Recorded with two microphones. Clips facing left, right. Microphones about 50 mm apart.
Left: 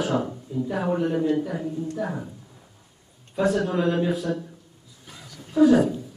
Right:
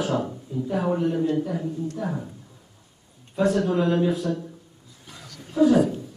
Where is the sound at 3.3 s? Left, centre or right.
Centre.